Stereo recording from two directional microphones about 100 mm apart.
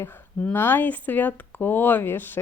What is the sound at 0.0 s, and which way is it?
Speech, 20° left (ahead or behind).